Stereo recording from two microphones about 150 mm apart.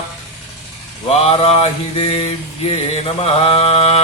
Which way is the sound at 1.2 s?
40° left (ahead or behind).